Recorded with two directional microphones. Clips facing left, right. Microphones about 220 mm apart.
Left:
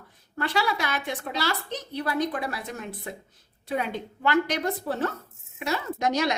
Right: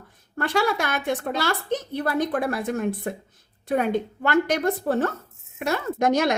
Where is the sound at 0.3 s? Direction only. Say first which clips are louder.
Right 4 dB; 50° right (ahead or behind).